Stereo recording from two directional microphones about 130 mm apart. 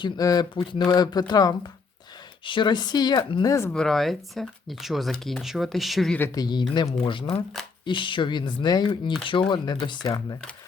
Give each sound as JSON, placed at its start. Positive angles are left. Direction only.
{"t": 0.0, "sound": "speech", "side_deg": 30}
{"t": 3.7, "sound": "speech", "side_deg": 5}
{"t": 6.3, "sound": "speech", "side_deg": 30}